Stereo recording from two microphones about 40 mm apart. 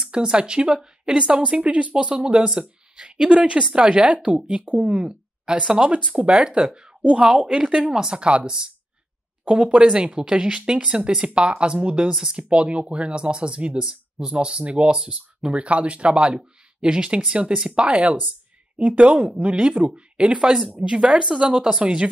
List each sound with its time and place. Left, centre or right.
0.1 s a woman's voice: right
2.0 s a woman's voice: right
4.9 s a woman's voice: right
8.2 s a woman's voice: right
17.8 s a woman's voice: right